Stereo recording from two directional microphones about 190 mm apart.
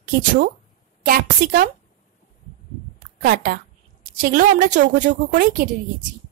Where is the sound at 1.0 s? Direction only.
50° right (ahead or behind).